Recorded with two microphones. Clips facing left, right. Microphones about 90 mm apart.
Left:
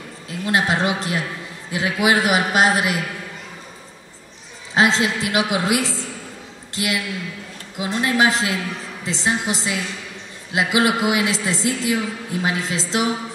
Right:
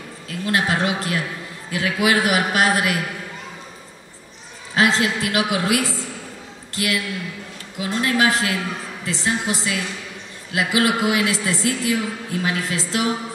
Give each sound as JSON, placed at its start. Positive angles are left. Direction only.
{"t": 0.3, "sound": "a man's voice", "side_deg": 20}
{"t": 4.7, "sound": "a man's voice", "side_deg": 20}